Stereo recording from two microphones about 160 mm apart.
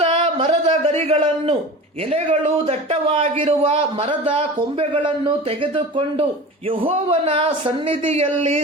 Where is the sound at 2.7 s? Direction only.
40° right (ahead or behind).